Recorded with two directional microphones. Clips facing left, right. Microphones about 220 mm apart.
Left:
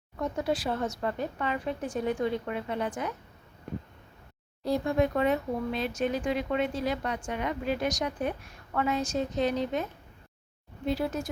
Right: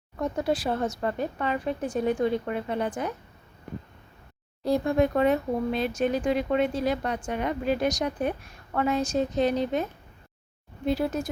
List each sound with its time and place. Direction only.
0.2 s speech: 40° right (ahead or behind)
4.6 s speech: 45° right (ahead or behind)
10.8 s speech: 45° right (ahead or behind)